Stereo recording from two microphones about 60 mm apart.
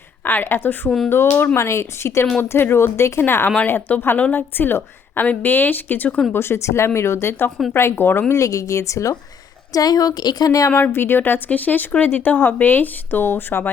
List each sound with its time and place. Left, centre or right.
0.3 s a woman's voice: left
0.9 s speech: centre
1.5 s speech: left
2.4 s a woman's voice: left
6.3 s a woman's voice: left
8.3 s speech: left
9.7 s a woman's voice: left
10.8 s a woman's voice: left